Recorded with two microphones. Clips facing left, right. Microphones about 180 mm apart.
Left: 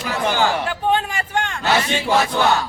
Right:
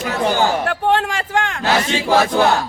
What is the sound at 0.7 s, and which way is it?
Speech, 75° right (ahead or behind).